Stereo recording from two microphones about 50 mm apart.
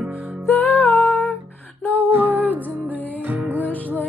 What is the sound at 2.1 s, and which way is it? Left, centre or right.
Music, right.